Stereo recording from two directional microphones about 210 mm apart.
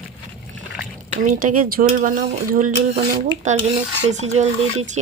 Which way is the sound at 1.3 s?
40° right (ahead or behind).